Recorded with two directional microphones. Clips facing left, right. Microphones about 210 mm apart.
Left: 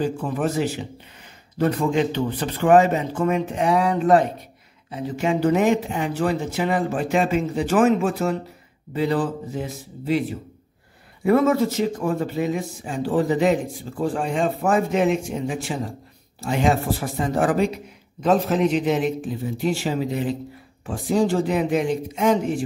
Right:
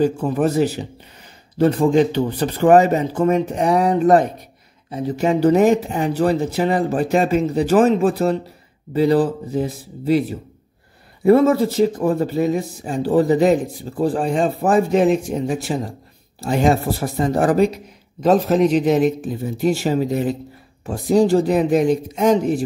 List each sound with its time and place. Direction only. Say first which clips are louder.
0.0 s speech: right 6 dB; 40° right (ahead or behind)
11.2 s speech: right 4 dB; 35° right (ahead or behind)